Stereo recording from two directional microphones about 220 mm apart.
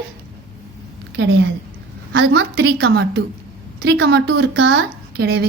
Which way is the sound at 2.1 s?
55° right (ahead or behind).